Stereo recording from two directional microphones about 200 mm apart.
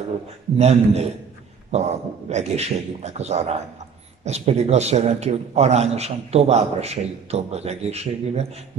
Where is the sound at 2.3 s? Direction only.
35° right (ahead or behind).